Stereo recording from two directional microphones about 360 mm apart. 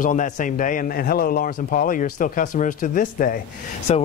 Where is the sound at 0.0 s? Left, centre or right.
Left.